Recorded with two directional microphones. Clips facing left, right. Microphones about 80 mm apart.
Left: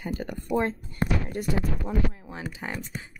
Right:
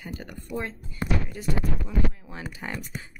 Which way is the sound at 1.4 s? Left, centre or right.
Left.